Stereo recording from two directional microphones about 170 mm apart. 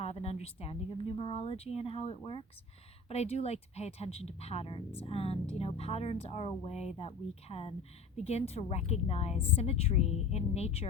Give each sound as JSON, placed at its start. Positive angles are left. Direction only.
{"t": 0.0, "sound": "speech", "side_deg": 40}